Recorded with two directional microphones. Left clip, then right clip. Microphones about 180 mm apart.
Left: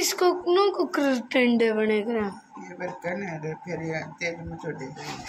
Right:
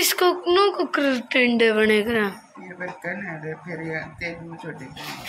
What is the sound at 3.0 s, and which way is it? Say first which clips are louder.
Speech: even; 35° left (ahead or behind).